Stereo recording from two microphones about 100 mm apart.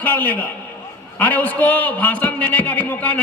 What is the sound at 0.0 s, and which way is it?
A man's voice, 15° left (ahead or behind).